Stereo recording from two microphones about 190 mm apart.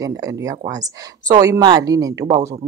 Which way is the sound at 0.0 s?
15° right (ahead or behind).